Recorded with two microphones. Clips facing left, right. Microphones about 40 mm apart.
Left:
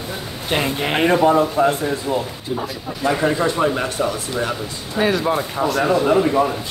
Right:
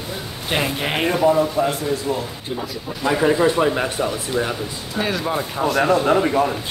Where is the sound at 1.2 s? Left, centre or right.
Left.